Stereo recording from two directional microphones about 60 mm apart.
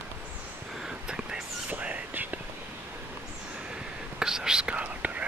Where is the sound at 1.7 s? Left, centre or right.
Right.